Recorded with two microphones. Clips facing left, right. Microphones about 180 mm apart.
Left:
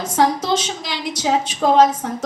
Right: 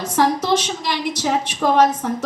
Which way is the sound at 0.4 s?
60° right (ahead or behind).